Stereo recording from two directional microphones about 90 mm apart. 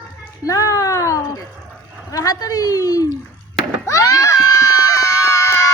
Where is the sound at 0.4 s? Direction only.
40° left (ahead or behind).